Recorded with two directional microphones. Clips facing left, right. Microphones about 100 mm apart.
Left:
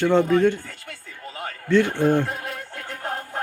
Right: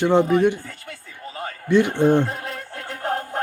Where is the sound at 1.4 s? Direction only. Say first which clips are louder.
Right 1 dB; 15° right (ahead or behind).